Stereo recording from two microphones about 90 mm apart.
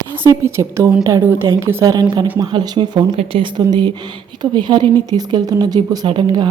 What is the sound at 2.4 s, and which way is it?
A woman's voice, 50° right (ahead or behind).